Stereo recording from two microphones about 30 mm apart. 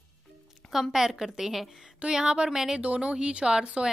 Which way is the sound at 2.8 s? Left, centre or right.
Right.